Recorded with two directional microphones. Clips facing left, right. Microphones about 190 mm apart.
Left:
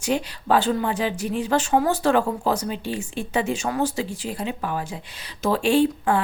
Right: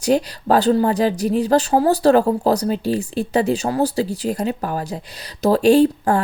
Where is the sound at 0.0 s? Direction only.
40° right (ahead or behind).